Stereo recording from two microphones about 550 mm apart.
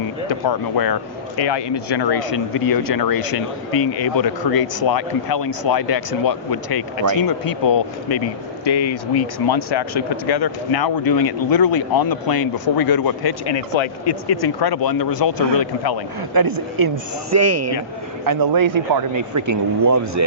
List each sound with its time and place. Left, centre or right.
0.3 s speech: left
16.3 s speech: right
18.3 s speech: right